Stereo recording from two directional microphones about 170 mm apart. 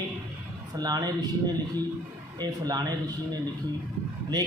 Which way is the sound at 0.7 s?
25° right (ahead or behind).